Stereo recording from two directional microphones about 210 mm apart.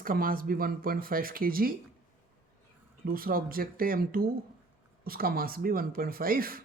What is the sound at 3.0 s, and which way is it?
Speech, 45° right (ahead or behind).